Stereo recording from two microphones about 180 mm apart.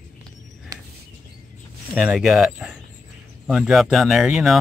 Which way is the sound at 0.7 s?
20° right (ahead or behind).